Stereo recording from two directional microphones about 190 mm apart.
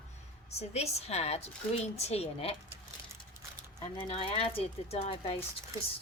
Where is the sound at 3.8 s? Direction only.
30° left (ahead or behind).